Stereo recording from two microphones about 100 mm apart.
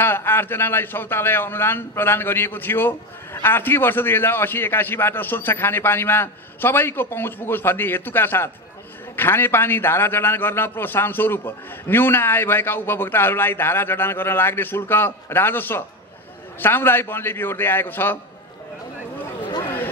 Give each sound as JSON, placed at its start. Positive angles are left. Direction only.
{"t": 0.0, "sound": "a man's voice", "side_deg": 20}